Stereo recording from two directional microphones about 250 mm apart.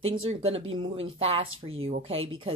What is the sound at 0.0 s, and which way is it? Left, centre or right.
A woman's voice, right.